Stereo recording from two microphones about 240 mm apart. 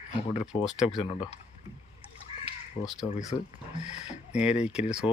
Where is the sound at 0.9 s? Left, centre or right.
Left.